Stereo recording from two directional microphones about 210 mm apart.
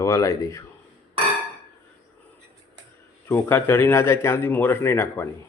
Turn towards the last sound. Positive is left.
turn(degrees=10)  # may be behind; listen again after turning